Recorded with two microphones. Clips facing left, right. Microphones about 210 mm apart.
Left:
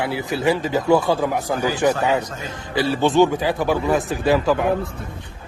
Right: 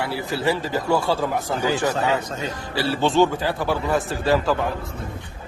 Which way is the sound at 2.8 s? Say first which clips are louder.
Left 3 dB; 15° left (ahead or behind).